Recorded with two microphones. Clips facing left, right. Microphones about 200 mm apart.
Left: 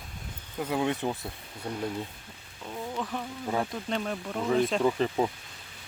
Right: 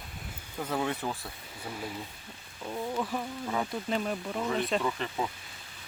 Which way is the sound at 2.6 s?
5° right (ahead or behind).